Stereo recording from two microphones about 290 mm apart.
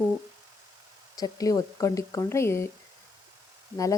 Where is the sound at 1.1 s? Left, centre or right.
Centre.